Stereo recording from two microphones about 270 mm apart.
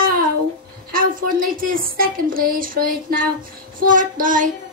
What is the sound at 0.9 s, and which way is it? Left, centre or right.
Speech, right.